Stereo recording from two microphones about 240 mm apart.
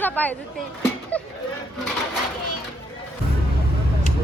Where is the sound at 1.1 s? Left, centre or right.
Centre.